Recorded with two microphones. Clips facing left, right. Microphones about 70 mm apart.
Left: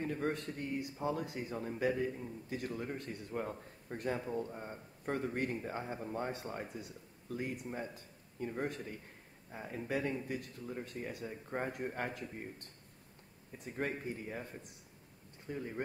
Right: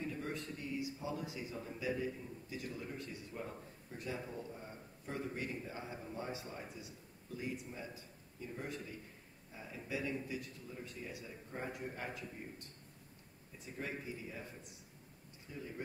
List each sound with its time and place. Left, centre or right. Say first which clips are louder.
0.0 s a man's voice: left 6 dB; left
13.7 s a man's voice: left 5 dB; left